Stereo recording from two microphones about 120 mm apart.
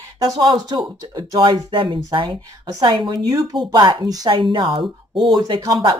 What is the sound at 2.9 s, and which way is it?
Speech, 45° right (ahead or behind).